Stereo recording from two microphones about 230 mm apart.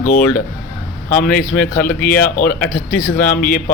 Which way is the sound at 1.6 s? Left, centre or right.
Centre.